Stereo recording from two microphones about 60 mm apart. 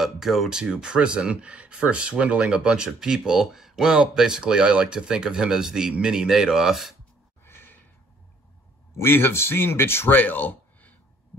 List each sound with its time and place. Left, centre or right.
0.0 s speech: centre
7.4 s sigh: left
8.9 s speech: left